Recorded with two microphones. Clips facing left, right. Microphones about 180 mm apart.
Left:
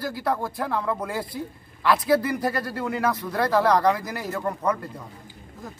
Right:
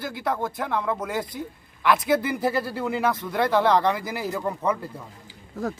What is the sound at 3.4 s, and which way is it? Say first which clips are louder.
A man's voice: left 1 dB; centre (ahead or behind).